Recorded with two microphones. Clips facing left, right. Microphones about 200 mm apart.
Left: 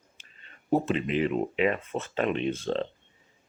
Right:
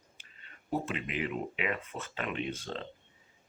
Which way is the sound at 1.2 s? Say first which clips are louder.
Left 8 dB; 30° left (ahead or behind).